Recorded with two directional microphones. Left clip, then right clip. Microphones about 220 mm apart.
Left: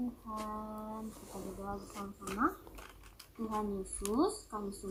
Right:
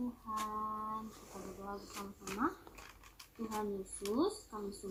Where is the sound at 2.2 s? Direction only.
30° left (ahead or behind).